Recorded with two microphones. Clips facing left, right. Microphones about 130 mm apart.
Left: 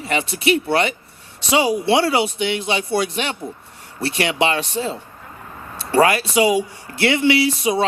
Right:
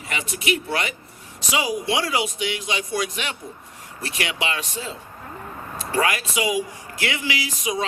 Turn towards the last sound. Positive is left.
turn(degrees=30)  # may be behind; listen again after turning